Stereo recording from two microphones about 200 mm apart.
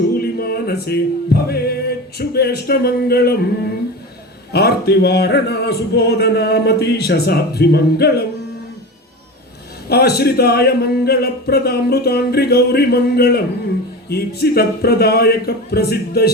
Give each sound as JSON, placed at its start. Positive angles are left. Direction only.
{"t": 0.1, "sound": "music", "side_deg": 50}
{"t": 4.5, "sound": "music", "side_deg": 55}
{"t": 9.9, "sound": "music", "side_deg": 50}